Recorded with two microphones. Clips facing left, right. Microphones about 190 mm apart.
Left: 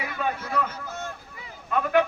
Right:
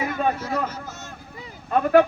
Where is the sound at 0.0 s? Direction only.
45° right (ahead or behind).